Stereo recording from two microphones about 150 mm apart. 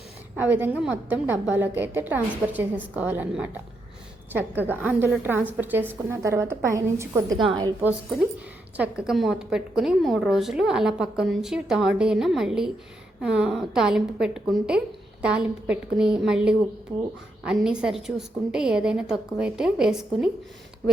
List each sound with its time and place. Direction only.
0.3 s a woman's voice: 10° right (ahead or behind)
7.4 s a woman's voice: 30° right (ahead or behind)
8.7 s a woman's voice: 10° right (ahead or behind)